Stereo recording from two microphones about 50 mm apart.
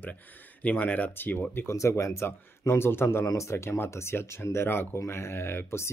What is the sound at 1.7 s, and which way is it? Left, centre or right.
Speech, left.